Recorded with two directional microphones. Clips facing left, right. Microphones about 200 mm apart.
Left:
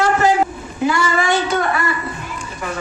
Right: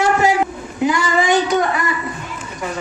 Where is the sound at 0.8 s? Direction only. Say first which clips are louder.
Right 1 dB; 15° right (ahead or behind).